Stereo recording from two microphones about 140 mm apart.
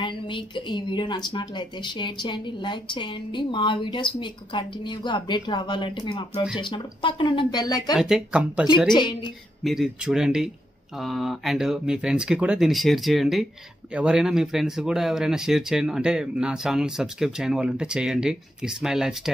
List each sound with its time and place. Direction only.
0.0 s speech: 35° left (ahead or behind)
7.9 s speech: 5° right (ahead or behind)
8.9 s speech: 35° left (ahead or behind)
9.6 s speech: centre (ahead or behind)